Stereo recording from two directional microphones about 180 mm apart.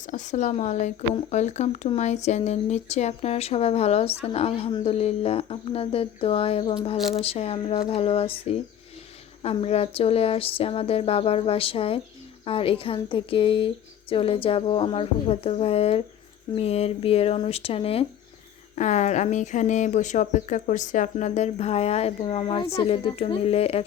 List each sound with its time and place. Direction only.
0.1 s a woman's voice: 40° left (ahead or behind)